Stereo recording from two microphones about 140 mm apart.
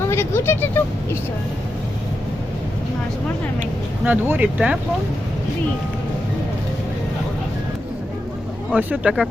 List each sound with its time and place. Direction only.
0.1 s vehicle: 20° left (ahead or behind)
3.6 s speech: 10° right (ahead or behind)
8.7 s speech: 10° right (ahead or behind)